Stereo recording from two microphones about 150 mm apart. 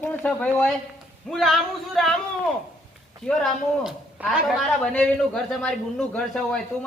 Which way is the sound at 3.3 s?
Centre (ahead or behind).